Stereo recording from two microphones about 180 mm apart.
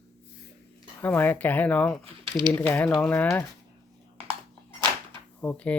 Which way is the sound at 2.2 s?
25° right (ahead or behind).